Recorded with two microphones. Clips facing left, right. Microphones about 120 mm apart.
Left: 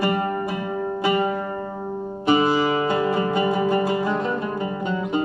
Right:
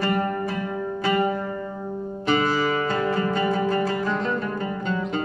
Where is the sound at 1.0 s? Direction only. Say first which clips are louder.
Even; 15° left (ahead or behind).